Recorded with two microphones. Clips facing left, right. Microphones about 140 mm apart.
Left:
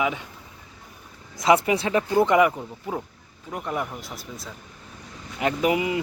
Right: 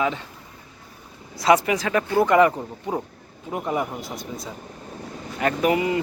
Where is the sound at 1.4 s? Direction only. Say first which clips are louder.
Right 1 dB; 25° left (ahead or behind).